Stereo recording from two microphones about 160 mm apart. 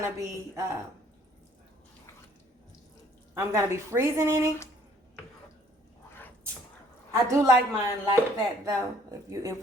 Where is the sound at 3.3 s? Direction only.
15° right (ahead or behind).